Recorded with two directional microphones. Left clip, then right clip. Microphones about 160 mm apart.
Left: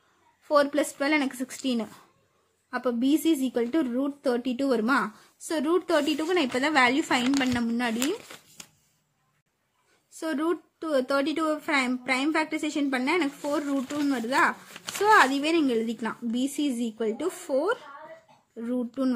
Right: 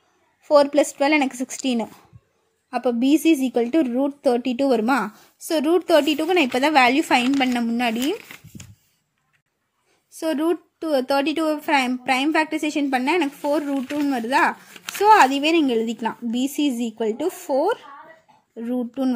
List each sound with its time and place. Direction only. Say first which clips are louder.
0.5 s speech: right 7 dB; 30° right (ahead or behind)
10.1 s speech: right 6 dB; 30° right (ahead or behind)